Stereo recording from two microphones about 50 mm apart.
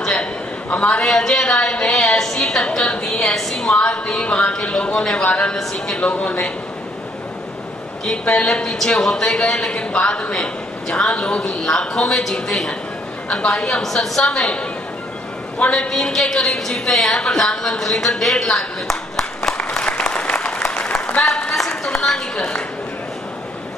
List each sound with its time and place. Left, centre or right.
0.0 s a sound: centre
0.7 s a woman's voice: left; by 3.6 s centre
3.7 s speech: left
8.0 s a woman's voice: centre
15.7 s a woman's voice: centre
19.8 s applause: left
21.5 s a sound: centre